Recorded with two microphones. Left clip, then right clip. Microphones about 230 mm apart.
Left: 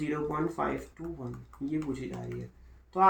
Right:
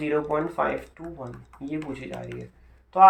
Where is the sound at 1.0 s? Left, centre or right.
Centre.